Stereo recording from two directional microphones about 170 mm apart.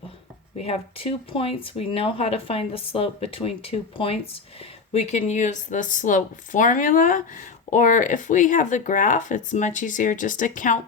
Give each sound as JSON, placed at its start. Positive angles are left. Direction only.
{"t": 0.5, "sound": "speech", "side_deg": 35}